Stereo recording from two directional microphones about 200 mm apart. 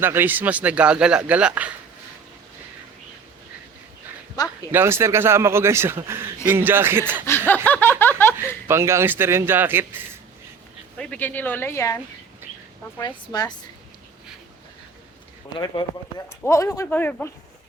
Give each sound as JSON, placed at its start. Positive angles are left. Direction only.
{"t": 0.0, "sound": "a man's voice", "side_deg": -10}
{"t": 4.4, "sound": "speech", "side_deg": 20}
{"t": 4.7, "sound": "a man's voice", "side_deg": -10}
{"t": 7.3, "sound": "snicker", "side_deg": 10}
{"t": 8.6, "sound": "a man's voice", "side_deg": -15}
{"t": 10.9, "sound": "snicker", "side_deg": 5}
{"t": 13.0, "sound": "speech", "side_deg": 20}
{"t": 15.5, "sound": "speech", "side_deg": 20}
{"t": 16.4, "sound": "snicker", "side_deg": 15}